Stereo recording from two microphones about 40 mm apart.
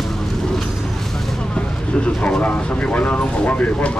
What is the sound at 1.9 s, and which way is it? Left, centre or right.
Speech, left.